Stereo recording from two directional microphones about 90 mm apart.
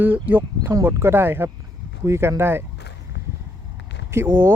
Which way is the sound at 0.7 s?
30° right (ahead or behind).